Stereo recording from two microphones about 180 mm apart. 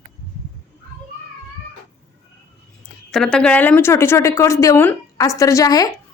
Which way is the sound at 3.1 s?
5° left (ahead or behind).